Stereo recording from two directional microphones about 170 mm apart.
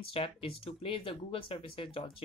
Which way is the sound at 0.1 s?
35° left (ahead or behind).